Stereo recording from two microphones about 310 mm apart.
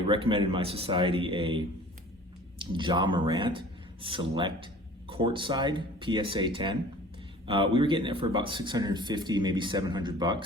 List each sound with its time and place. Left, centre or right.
0.1 s speech: centre